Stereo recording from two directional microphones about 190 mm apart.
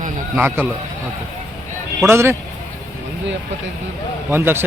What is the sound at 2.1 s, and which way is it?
Speech, 15° right (ahead or behind).